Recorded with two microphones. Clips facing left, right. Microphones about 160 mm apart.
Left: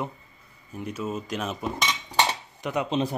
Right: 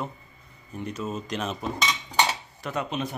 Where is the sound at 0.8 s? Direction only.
5° left (ahead or behind).